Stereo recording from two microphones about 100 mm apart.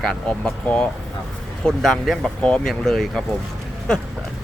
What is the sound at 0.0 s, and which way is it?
Speech, 5° left (ahead or behind).